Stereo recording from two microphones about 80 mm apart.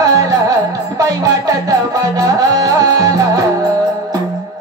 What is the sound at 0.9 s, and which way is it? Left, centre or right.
Music, right.